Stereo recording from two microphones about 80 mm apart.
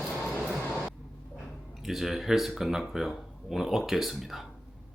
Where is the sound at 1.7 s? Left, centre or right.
Centre.